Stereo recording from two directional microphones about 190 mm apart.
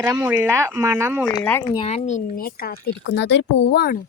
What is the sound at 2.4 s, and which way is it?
Speech, 50° left (ahead or behind).